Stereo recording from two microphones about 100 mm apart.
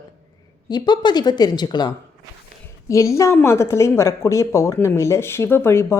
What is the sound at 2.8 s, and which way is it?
Speech, 30° left (ahead or behind).